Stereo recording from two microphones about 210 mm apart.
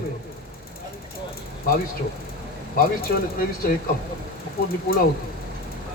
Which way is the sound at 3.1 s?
45° left (ahead or behind).